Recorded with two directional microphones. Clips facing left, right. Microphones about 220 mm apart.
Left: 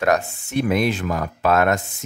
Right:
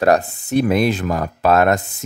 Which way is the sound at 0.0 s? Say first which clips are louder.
Right 4 dB; 35° right (ahead or behind).